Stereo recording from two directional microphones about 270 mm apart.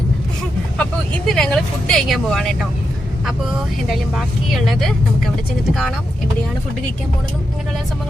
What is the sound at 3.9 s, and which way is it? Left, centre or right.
Speech, centre.